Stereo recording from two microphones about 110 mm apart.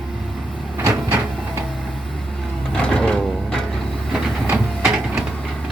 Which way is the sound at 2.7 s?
5° left (ahead or behind).